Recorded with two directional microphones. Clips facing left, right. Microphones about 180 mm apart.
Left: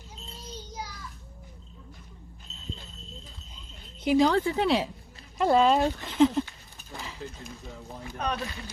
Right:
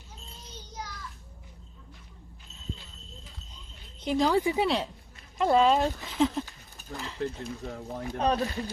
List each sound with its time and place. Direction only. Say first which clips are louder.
2.5 s a sound: left 3 dB; 65° left (ahead or behind)
4.0 s speech: left 4 dB; 5° left (ahead or behind)
4.3 s speech: even; 10° right (ahead or behind)
5.4 s speech: left 1 dB; centre (ahead or behind)
6.9 s a sound: right 2 dB; centre (ahead or behind)
7.2 s speech: right 7 dB; 65° right (ahead or behind)
8.2 s speech: right 5 dB; 35° right (ahead or behind)